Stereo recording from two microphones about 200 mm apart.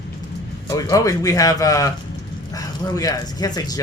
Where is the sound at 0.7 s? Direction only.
15° left (ahead or behind).